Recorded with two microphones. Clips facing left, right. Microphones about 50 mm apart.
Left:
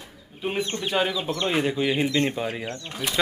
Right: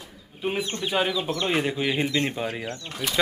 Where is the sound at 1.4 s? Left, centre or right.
Centre.